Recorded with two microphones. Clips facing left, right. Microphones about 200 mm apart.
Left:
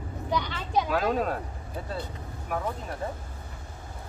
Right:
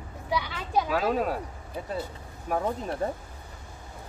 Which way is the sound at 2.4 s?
35° right (ahead or behind).